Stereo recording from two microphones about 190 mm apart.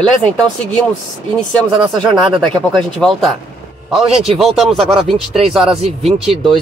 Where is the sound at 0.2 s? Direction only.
5° left (ahead or behind).